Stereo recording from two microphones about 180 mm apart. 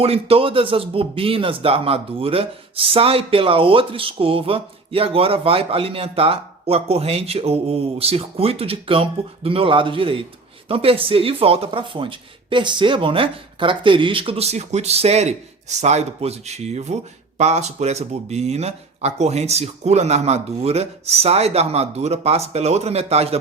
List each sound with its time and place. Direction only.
0.0 s speech: 35° right (ahead or behind)